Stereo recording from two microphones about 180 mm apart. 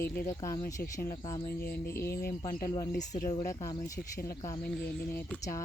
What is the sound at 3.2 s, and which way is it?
Speech, 20° left (ahead or behind).